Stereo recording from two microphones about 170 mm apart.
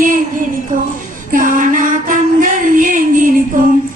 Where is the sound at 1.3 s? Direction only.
50° right (ahead or behind).